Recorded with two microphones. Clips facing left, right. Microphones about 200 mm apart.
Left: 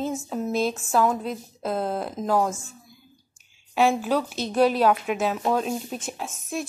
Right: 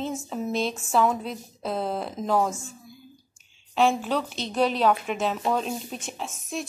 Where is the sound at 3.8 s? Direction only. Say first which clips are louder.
Left 2 dB; 5° left (ahead or behind).